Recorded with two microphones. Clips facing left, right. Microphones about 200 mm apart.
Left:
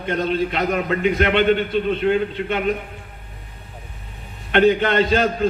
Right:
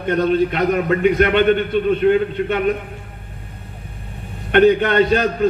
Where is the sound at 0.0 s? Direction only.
45° right (ahead or behind).